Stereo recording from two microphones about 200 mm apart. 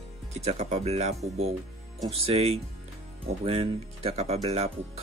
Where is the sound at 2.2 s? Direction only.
30° right (ahead or behind).